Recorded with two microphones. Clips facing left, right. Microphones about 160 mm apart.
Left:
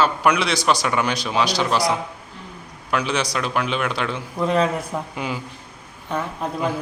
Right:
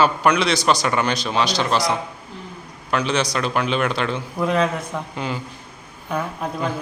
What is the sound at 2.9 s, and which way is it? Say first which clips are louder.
A man's voice: right 1 dB; 5° left (ahead or behind).